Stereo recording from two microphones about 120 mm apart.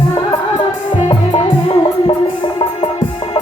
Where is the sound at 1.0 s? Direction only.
50° left (ahead or behind).